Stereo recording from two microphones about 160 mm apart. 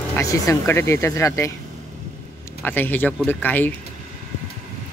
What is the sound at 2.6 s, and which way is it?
Speech, 10° left (ahead or behind).